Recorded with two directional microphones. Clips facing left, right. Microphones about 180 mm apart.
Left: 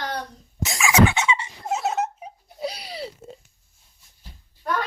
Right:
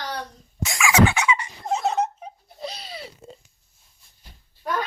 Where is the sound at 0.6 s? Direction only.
20° left (ahead or behind).